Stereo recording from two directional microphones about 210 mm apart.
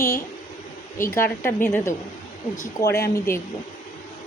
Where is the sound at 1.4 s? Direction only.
10° left (ahead or behind).